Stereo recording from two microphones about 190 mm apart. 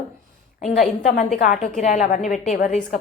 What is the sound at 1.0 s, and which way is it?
A woman's voice, 40° left (ahead or behind).